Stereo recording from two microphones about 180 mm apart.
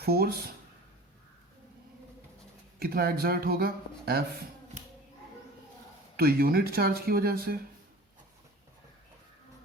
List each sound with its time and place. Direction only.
0.0 s speech: 60° right (ahead or behind)
2.7 s speech: 60° right (ahead or behind)
6.1 s speech: 55° right (ahead or behind)